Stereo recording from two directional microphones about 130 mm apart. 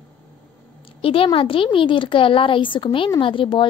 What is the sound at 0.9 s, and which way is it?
A woman's voice, 45° left (ahead or behind).